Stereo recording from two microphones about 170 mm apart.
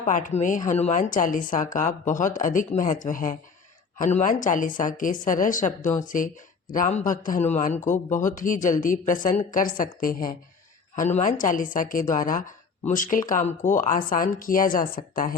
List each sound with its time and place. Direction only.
0.0 s speech: 45° left (ahead or behind)